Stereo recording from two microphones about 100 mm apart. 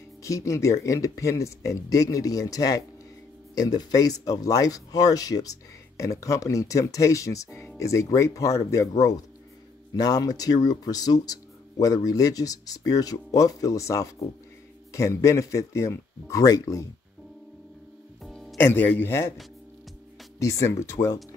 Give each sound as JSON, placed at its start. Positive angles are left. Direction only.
{"t": 0.2, "sound": "speech", "side_deg": 35}
{"t": 18.2, "sound": "music", "side_deg": 0}
{"t": 18.6, "sound": "a man's voice", "side_deg": 20}
{"t": 20.3, "sound": "speech", "side_deg": 30}